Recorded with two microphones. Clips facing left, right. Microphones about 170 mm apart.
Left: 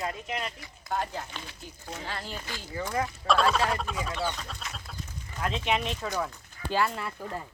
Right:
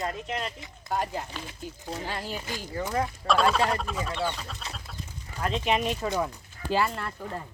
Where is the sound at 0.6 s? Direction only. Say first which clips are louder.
Right 2 dB; 15° right (ahead or behind).